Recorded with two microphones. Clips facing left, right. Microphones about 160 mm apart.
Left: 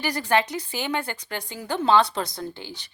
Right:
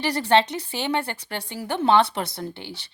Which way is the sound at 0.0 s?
30° right (ahead or behind).